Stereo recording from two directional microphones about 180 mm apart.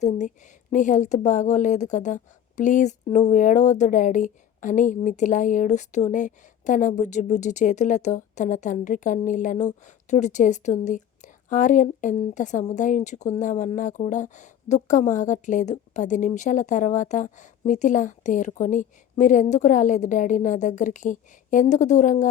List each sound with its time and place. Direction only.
0.0 s speech: 45° left (ahead or behind)